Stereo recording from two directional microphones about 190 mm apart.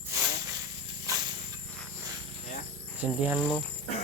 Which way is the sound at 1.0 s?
20° right (ahead or behind).